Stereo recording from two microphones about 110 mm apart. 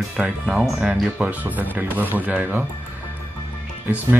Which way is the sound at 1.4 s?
15° right (ahead or behind).